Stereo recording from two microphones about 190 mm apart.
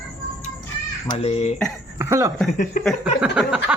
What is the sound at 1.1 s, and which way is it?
Speech, 30° left (ahead or behind).